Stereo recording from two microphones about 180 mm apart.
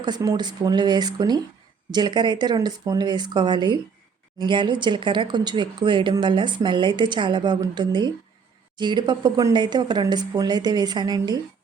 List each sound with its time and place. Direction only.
0.0 s speech: 20° right (ahead or behind)